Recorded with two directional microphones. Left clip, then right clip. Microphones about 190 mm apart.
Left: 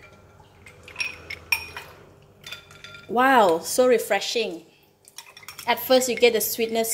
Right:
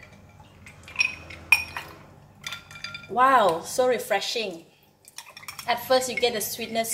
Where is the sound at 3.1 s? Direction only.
45° left (ahead or behind).